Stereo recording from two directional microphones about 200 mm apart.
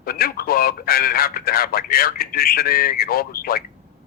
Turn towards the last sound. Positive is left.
turn(degrees=50)  # may be behind; listen again after turning